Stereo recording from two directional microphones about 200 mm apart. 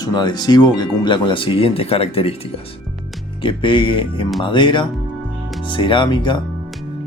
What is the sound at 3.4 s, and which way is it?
Speech, 25° left (ahead or behind).